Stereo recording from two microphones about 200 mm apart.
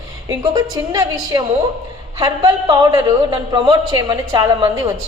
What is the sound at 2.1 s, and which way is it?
A man's voice, 20° right (ahead or behind).